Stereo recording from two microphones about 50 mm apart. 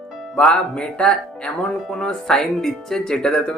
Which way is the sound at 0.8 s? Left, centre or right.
Centre.